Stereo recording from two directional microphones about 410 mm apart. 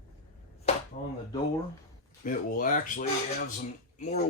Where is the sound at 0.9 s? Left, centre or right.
Centre.